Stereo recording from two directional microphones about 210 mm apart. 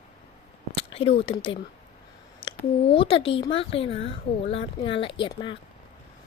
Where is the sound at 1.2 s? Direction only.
25° left (ahead or behind).